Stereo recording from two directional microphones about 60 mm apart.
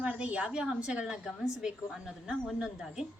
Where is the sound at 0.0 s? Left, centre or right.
Centre.